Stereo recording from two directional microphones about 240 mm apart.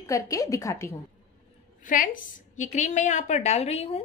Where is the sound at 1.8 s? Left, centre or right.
Left.